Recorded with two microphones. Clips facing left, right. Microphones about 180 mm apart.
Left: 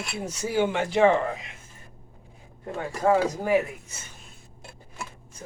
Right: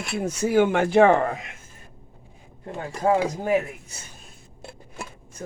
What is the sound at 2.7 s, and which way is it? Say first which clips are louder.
Speech: even; 20° right (ahead or behind).